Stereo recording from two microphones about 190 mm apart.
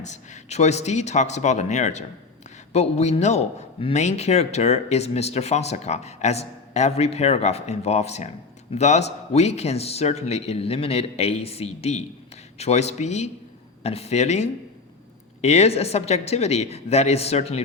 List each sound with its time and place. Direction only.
0.0 s a man's voice: 35° left (ahead or behind)